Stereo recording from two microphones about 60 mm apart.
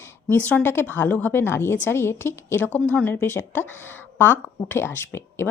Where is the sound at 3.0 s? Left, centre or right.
Left.